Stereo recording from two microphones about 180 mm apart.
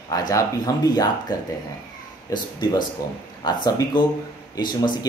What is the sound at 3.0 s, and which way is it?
Speech, 20° left (ahead or behind).